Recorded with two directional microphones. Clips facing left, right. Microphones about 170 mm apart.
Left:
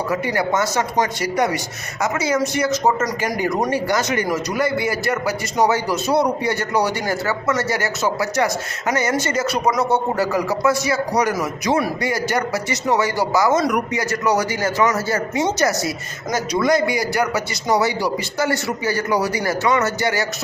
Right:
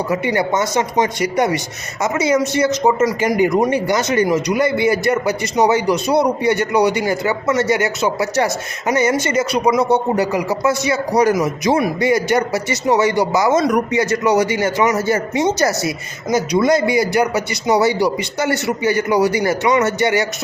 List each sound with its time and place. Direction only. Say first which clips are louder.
0.1 s a man's voice: right 3 dB; 20° right (ahead or behind)